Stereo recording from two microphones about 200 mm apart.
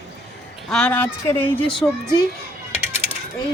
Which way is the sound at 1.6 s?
25° left (ahead or behind).